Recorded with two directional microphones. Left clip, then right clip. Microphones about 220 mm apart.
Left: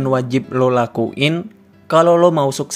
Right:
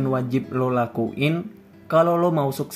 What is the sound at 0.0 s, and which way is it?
Speech, 35° left (ahead or behind).